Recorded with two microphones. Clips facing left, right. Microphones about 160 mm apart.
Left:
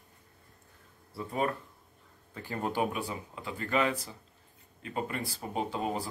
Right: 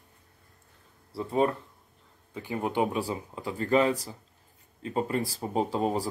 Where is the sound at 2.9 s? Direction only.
35° right (ahead or behind).